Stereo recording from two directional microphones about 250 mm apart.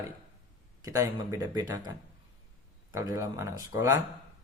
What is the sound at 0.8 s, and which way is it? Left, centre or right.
Speech, centre.